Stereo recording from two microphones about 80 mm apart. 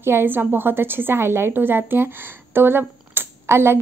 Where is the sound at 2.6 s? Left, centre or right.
Right.